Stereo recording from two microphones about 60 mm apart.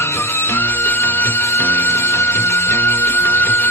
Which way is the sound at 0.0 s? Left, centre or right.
Left.